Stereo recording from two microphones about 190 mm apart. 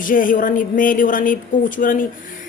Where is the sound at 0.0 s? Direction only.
45° left (ahead or behind).